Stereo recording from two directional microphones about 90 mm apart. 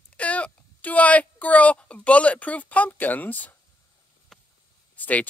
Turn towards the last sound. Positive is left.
turn(degrees=20)  # may be behind; listen again after turning